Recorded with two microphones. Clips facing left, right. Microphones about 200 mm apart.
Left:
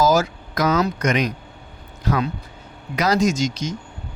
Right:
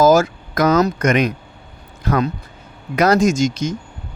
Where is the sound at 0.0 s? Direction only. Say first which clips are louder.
Right 5 dB; 50° right (ahead or behind).